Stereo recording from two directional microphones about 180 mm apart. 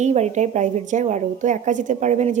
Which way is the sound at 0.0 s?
40° right (ahead or behind).